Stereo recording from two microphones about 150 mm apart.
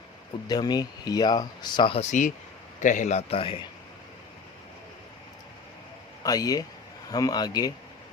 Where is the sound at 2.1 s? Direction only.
55° left (ahead or behind); by 3.6 s 35° left (ahead or behind).